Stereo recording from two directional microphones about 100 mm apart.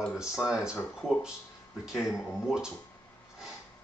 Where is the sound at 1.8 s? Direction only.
5° right (ahead or behind).